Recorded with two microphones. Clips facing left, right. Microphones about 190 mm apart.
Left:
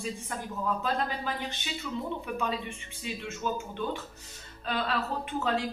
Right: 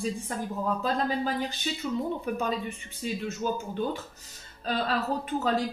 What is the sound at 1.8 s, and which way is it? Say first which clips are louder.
A woman's voice: right 4 dB; 40° right (ahead or behind).